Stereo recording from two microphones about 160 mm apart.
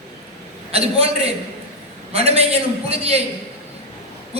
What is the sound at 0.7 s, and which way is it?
A woman's voice, 40° right (ahead or behind).